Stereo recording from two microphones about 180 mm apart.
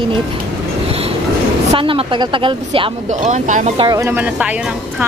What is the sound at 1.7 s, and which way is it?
Speech, 30° right (ahead or behind).